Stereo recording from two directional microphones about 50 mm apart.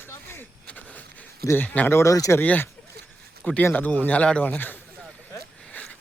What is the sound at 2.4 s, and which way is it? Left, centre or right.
Speech, left.